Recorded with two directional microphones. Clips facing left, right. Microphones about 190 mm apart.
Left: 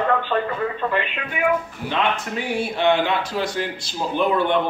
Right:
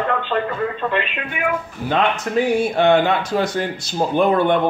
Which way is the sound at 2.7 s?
50° right (ahead or behind).